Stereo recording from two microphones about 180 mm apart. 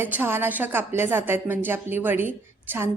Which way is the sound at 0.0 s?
10° right (ahead or behind).